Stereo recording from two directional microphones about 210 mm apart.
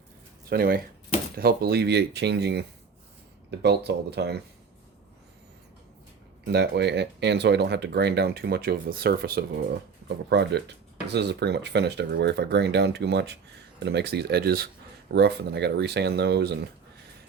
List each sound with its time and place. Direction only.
0.5 s speech: 45° right (ahead or behind)
6.4 s speech: 55° right (ahead or behind)